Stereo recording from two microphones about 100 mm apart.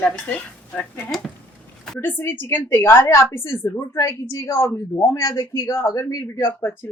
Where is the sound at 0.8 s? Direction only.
15° left (ahead or behind).